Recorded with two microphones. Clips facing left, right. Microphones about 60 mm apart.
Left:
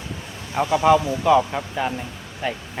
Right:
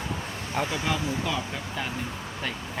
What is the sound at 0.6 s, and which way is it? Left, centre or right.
Speech, left.